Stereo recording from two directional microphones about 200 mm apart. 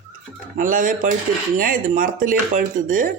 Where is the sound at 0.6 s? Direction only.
40° right (ahead or behind).